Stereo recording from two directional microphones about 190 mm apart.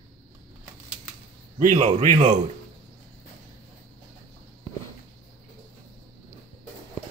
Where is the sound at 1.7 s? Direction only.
25° right (ahead or behind).